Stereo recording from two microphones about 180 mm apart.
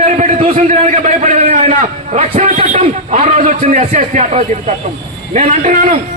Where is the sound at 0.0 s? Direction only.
40° right (ahead or behind).